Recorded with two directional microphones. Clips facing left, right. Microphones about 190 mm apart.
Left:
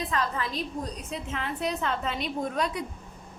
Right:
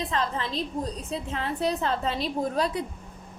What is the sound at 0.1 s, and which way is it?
A woman's voice, 30° right (ahead or behind).